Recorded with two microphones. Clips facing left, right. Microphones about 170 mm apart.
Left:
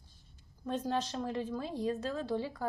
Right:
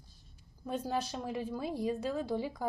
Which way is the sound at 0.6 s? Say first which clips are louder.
Left 1 dB; 10° right (ahead or behind).